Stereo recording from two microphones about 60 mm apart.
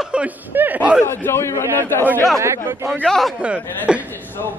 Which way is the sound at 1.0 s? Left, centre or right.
Left.